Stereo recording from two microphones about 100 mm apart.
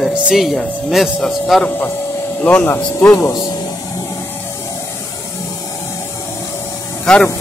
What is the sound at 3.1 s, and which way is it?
Speech, 35° left (ahead or behind).